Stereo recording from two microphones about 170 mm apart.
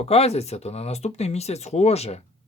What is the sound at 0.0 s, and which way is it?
Speech, 35° left (ahead or behind).